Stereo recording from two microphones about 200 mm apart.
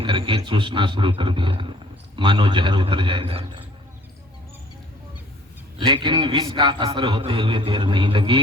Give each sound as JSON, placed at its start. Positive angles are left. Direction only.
{"t": 0.0, "sound": "a man's voice", "side_deg": -25}
{"t": 5.8, "sound": "a man's voice", "side_deg": -25}